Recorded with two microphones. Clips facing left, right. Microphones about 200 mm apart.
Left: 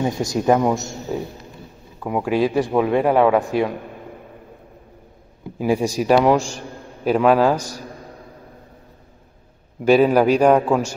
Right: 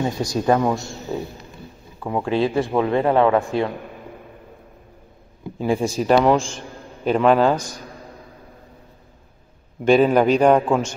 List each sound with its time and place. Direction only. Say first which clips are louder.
0.0 s a man's voice: left 1 dB; 20° left (ahead or behind)
5.6 s a man's voice: left 1 dB; 10° left (ahead or behind)
9.8 s a man's voice: left 1 dB; 5° left (ahead or behind)